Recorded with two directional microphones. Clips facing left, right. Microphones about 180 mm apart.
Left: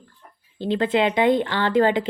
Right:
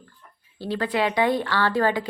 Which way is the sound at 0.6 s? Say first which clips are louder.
Left 4 dB; 20° left (ahead or behind).